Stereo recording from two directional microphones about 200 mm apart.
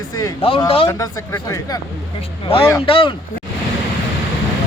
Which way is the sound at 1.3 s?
15° left (ahead or behind).